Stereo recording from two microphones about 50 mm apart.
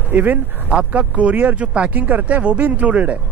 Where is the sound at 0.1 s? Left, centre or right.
Right.